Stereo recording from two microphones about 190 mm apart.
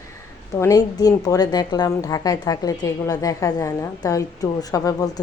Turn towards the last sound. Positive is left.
turn(degrees=20)  # may be behind; listen again after turning